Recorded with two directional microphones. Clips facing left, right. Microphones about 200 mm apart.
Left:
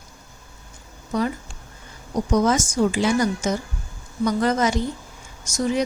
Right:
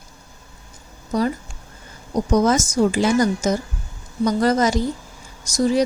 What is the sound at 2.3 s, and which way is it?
A woman's voice, 40° right (ahead or behind).